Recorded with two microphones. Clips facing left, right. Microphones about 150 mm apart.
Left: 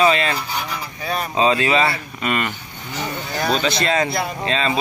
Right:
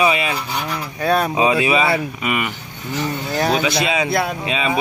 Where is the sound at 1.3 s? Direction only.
15° right (ahead or behind).